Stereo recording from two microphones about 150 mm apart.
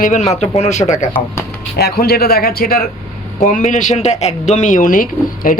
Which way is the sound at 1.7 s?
90° left.